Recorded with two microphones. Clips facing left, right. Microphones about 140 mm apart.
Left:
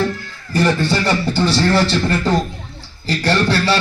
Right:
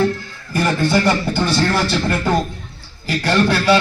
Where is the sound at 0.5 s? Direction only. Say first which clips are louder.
Even; 15° right (ahead or behind).